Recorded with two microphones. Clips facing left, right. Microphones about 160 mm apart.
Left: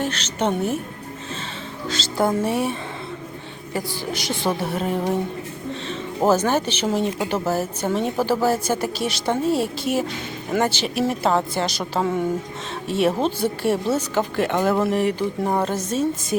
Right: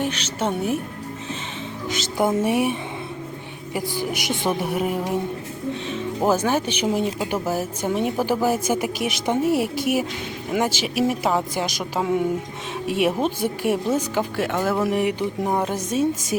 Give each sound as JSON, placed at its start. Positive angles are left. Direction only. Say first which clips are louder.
{"t": 0.0, "sound": "speech", "louder": "left 1 dB", "side_deg": -10}
{"t": 1.9, "sound": "speech", "louder": "even", "side_deg": -15}
{"t": 3.8, "sound": "speech", "louder": "right 1 dB", "side_deg": -15}